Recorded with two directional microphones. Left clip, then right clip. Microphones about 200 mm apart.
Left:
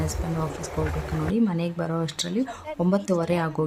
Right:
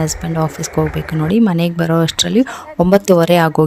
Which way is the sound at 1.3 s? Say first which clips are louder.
Right 12 dB; 45° right (ahead or behind).